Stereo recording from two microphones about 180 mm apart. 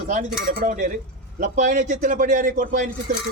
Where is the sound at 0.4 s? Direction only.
50° right (ahead or behind).